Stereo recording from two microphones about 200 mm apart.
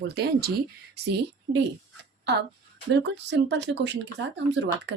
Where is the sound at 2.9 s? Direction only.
60° right (ahead or behind).